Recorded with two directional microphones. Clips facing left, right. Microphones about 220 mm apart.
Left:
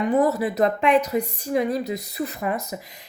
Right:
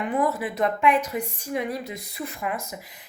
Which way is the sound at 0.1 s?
40° left (ahead or behind).